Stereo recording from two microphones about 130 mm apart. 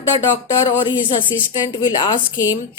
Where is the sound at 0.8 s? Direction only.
40° left (ahead or behind).